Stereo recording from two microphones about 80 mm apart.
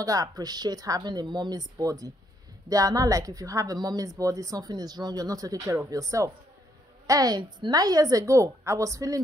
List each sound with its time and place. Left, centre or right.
0.0 s speech: right